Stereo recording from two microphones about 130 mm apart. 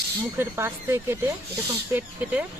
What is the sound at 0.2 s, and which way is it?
Speech, 20° right (ahead or behind).